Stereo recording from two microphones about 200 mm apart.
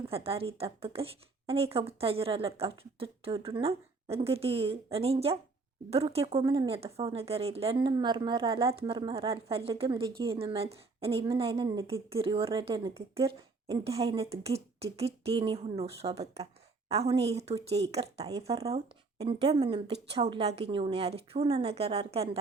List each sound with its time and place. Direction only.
0.1 s speech: 30° right (ahead or behind)
12.1 s a woman's voice: 30° right (ahead or behind)
19.2 s speech: 30° right (ahead or behind)